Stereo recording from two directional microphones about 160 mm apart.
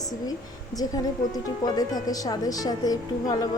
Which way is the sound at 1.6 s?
25° left (ahead or behind).